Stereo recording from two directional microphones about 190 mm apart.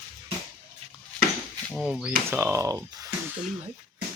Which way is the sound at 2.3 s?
10° right (ahead or behind).